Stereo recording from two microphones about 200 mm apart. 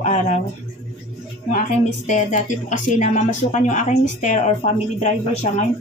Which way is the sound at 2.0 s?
40° left (ahead or behind).